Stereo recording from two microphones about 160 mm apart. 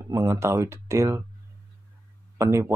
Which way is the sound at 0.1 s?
15° right (ahead or behind).